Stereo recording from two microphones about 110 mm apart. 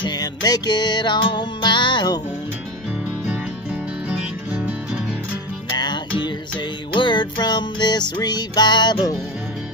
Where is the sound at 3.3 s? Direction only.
10° right (ahead or behind).